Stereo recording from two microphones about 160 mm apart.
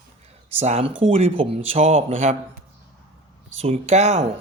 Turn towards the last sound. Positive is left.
turn(degrees=-40)  # may be behind; listen again after turning